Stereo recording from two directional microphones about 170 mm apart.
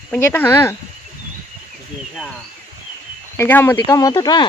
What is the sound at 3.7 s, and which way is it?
Speech, 25° left (ahead or behind).